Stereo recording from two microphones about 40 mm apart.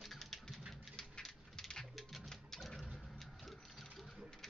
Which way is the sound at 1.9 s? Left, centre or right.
Centre.